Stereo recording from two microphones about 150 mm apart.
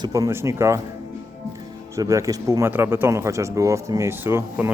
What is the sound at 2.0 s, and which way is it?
Speech, 20° right (ahead or behind).